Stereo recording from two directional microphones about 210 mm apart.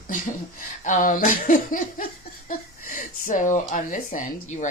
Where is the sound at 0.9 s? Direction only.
40° left (ahead or behind).